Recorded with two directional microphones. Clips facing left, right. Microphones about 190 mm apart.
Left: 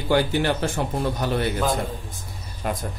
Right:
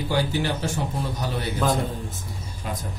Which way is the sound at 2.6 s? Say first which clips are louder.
Left 5 dB; 60° left (ahead or behind).